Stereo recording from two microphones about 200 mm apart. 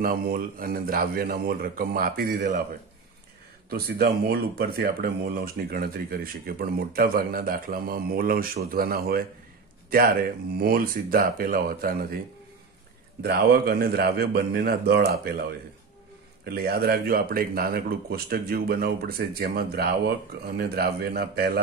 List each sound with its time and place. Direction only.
0.0 s speech: 50° right (ahead or behind)
3.7 s speech: 50° right (ahead or behind)
13.2 s speech: 50° right (ahead or behind)
16.4 s speech: 50° right (ahead or behind)